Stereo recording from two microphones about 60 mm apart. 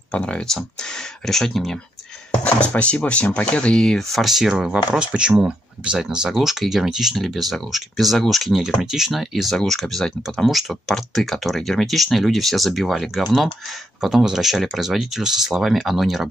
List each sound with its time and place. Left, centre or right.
0.1 s speech: centre
0.5 s speech: centre
2.4 s speech: centre
4.2 s speech: centre